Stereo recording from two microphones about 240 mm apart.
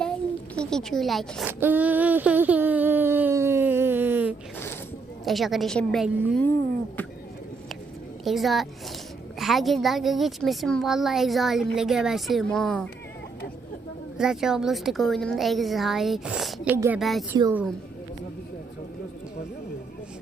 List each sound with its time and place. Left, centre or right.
0.5 s a woman's voice: centre
4.5 s a sound: centre
5.2 s a child's voice: centre
8.2 s a child's voice: centre
14.2 s a child's voice: centre
17.0 s a child's voice: centre
17.3 s speech: centre